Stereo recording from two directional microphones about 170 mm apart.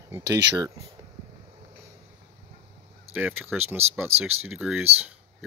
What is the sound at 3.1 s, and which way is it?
Speech, 10° right (ahead or behind).